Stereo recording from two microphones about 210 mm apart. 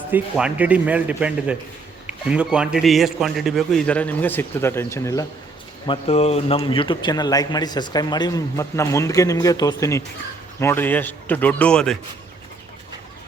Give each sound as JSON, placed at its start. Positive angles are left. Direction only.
{"t": 0.1, "sound": "a man's voice", "side_deg": -5}
{"t": 5.8, "sound": "a man's voice", "side_deg": 25}